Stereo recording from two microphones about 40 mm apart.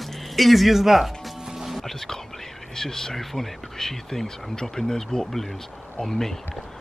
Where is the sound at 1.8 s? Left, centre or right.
Centre.